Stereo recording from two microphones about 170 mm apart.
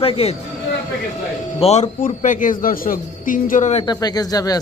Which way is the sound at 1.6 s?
40° left (ahead or behind).